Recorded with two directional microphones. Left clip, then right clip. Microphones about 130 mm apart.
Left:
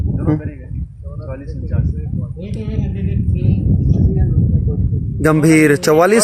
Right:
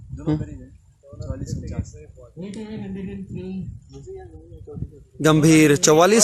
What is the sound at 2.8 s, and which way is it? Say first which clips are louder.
Music: left 8 dB; 60° left (ahead or behind).